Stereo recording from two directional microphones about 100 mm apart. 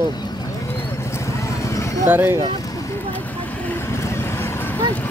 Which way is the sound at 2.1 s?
20° right (ahead or behind).